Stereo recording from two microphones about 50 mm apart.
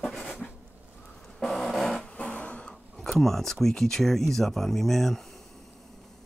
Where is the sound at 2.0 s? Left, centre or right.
Left.